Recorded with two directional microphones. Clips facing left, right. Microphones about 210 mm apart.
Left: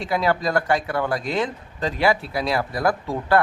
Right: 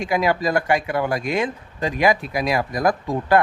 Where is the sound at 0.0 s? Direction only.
10° right (ahead or behind).